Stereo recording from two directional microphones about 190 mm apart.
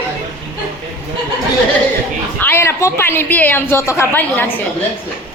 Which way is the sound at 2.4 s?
10° left (ahead or behind).